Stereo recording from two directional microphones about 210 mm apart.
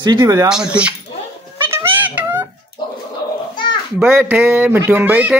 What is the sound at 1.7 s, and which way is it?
Music, 10° right (ahead or behind).